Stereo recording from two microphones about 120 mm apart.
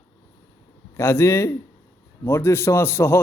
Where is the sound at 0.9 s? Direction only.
20° left (ahead or behind).